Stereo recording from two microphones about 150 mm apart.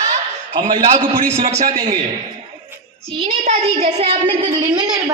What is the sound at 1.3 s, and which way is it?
Speech, 45° right (ahead or behind).